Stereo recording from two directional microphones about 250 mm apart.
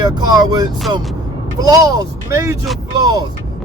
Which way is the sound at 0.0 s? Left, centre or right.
Centre.